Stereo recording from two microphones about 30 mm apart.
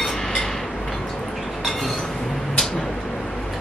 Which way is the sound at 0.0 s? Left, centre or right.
Centre.